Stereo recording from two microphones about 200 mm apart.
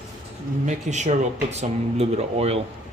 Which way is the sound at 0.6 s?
35° right (ahead or behind).